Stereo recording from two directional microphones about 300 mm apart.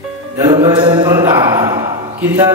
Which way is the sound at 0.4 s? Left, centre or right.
Centre.